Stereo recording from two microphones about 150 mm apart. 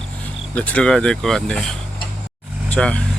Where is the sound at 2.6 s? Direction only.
10° left (ahead or behind).